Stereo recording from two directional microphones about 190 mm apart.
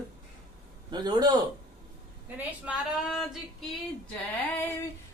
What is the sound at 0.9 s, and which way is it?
Speech, 20° right (ahead or behind).